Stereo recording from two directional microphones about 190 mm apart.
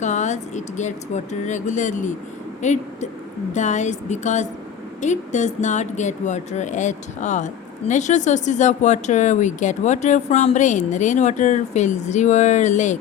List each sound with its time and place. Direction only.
0.0 s a woman's voice: 40° left (ahead or behind)